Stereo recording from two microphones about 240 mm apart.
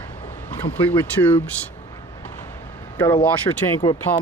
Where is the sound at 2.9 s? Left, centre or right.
Centre.